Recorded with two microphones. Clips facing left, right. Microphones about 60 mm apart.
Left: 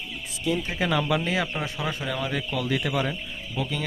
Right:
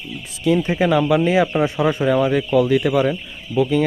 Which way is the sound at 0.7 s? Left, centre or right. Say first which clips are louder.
Right 8 dB; centre.